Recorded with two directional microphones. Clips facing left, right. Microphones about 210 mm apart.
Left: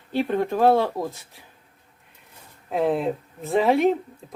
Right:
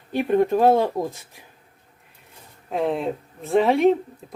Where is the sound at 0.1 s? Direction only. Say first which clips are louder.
Right 4 dB; 15° right (ahead or behind).